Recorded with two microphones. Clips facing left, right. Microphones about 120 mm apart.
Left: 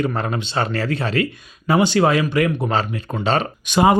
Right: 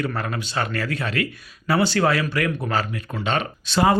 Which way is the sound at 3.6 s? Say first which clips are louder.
Left 3 dB; 15° left (ahead or behind).